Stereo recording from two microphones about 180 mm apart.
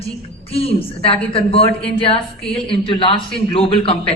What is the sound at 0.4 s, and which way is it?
A man's voice, 35° left (ahead or behind).